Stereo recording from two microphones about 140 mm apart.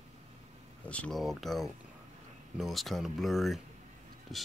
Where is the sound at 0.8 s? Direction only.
10° left (ahead or behind).